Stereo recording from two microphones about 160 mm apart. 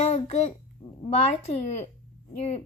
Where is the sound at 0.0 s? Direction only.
40° left (ahead or behind).